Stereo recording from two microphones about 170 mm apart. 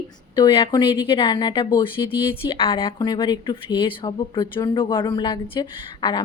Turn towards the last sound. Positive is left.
turn(degrees=25)  # may be behind; listen again after turning